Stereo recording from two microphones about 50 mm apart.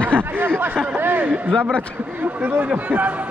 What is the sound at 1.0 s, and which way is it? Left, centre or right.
Speech, right.